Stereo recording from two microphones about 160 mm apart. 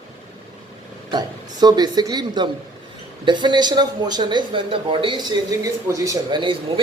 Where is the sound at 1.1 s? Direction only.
25° right (ahead or behind).